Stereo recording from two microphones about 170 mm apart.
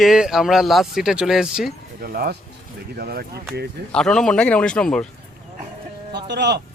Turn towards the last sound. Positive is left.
turn(degrees=-85)